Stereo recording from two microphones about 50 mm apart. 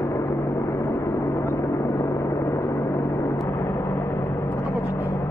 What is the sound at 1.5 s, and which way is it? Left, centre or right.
Gong, left.